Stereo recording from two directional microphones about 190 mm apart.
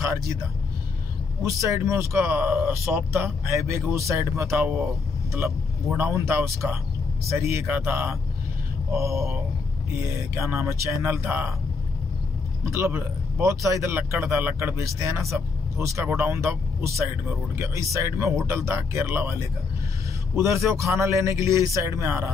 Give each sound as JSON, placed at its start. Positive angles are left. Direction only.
{"t": 0.0, "sound": "speech", "side_deg": -15}
{"t": 1.4, "sound": "speech", "side_deg": -15}
{"t": 5.9, "sound": "speech", "side_deg": -15}
{"t": 12.6, "sound": "speech", "side_deg": -15}